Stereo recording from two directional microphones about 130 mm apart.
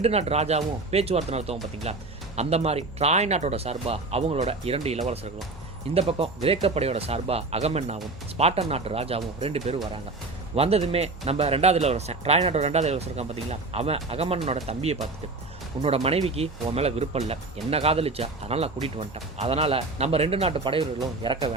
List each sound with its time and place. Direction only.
0.0 s speech: 55° right (ahead or behind)
21.2 s speech: 35° right (ahead or behind)